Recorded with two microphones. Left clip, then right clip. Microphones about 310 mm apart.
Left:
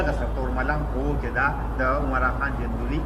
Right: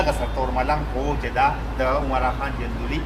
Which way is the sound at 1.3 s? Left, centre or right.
Centre.